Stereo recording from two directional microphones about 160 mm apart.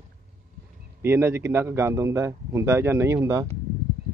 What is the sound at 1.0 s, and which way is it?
A man's voice, 15° right (ahead or behind).